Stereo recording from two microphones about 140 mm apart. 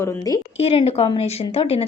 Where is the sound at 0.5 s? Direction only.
45° left (ahead or behind).